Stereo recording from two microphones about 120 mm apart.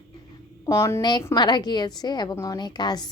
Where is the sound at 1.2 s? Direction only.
35° left (ahead or behind).